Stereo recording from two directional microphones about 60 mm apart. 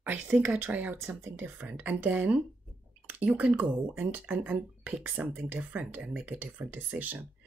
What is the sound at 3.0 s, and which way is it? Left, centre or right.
Drip, right.